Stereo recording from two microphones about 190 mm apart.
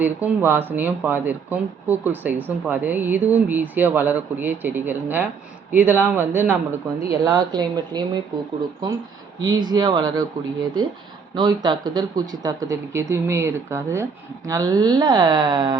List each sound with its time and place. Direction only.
0.0 s speech: 10° right (ahead or behind)
9.4 s speech: 20° right (ahead or behind)
11.3 s speech: 25° right (ahead or behind)